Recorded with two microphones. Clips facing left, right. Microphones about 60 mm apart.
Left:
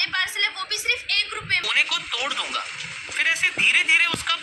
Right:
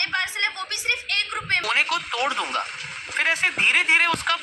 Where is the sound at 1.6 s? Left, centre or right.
Right.